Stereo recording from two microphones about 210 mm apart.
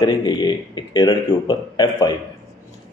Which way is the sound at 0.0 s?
20° left (ahead or behind).